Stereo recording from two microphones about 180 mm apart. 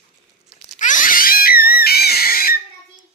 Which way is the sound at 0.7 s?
45° left (ahead or behind).